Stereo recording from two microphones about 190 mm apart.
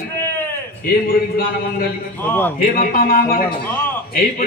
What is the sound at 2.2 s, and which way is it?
Speech, 10° left (ahead or behind).